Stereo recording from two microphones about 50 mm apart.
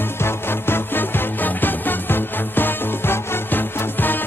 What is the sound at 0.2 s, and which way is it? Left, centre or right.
Music, left.